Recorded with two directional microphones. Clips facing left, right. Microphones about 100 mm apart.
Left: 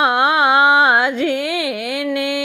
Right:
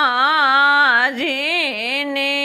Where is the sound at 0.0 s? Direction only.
20° left (ahead or behind).